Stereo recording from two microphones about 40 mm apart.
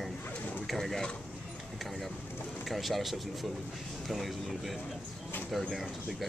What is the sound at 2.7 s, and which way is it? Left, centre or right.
Speech, centre.